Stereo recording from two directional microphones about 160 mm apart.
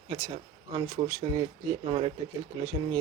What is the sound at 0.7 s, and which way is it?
Speech, 25° right (ahead or behind).